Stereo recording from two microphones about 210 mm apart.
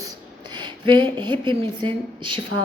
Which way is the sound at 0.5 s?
20° right (ahead or behind).